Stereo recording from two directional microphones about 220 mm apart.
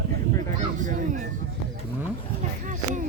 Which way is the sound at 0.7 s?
35° right (ahead or behind).